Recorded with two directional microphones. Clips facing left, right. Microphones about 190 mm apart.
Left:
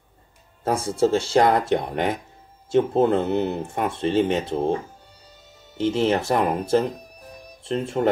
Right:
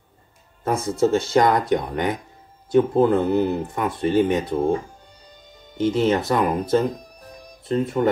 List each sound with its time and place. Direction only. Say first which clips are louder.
0.7 s speech: right 1 dB; 30° left (ahead or behind)
5.2 s music: right 3 dB; 5° left (ahead or behind)
5.8 s speech: right 1 dB; 30° left (ahead or behind)